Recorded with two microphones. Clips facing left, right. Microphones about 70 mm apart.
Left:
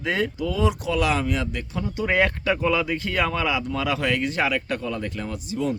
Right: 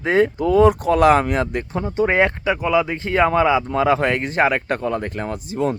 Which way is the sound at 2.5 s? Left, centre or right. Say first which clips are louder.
Right 4 dB; centre.